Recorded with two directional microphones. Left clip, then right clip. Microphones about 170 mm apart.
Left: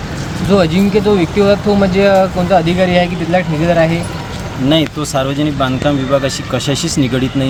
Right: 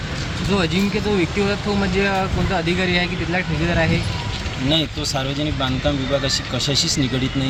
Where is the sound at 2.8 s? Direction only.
80° left.